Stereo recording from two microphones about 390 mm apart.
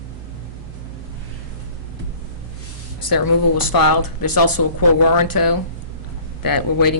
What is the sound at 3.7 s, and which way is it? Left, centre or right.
Speech, left.